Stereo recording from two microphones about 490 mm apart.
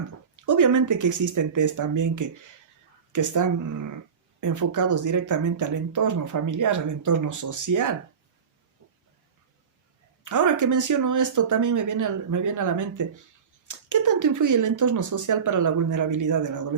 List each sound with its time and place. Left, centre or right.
0.4 s speech: right
10.2 s speech: right